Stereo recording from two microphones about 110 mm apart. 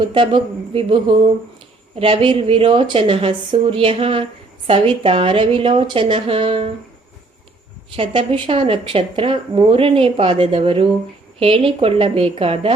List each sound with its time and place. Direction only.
0.0 s a woman's voice: 50° right (ahead or behind)
7.9 s a woman's voice: 55° right (ahead or behind)